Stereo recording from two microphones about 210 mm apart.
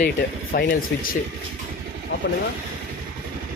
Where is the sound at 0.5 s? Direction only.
45° left (ahead or behind).